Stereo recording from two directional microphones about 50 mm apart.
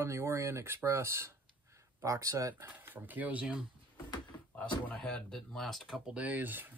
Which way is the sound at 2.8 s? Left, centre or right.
Right.